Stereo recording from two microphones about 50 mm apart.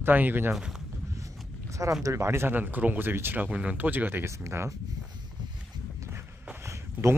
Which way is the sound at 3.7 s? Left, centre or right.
Right.